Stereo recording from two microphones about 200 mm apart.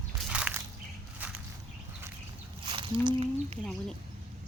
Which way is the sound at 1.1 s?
5° right (ahead or behind).